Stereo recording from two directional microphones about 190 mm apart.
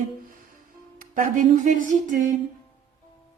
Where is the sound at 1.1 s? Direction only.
40° right (ahead or behind).